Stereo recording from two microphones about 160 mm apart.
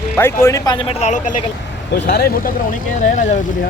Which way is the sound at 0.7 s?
40° left (ahead or behind).